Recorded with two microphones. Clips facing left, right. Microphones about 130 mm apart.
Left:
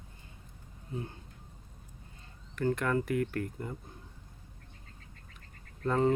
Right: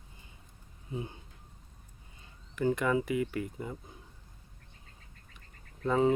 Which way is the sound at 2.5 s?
10° right (ahead or behind).